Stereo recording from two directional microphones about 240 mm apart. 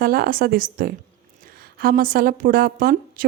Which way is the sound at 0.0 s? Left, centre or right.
Right.